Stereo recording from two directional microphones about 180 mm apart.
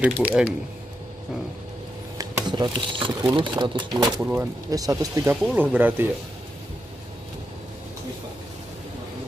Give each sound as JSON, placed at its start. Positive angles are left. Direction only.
{"t": 0.0, "sound": "speech", "side_deg": -5}
{"t": 2.1, "sound": "speech", "side_deg": -25}
{"t": 5.3, "sound": "speech", "side_deg": -5}